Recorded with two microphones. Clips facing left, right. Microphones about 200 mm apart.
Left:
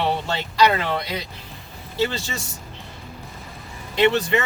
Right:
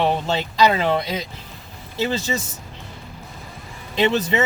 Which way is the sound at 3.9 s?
20° right (ahead or behind).